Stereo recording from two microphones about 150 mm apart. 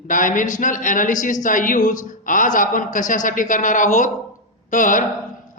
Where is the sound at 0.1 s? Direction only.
60° left (ahead or behind).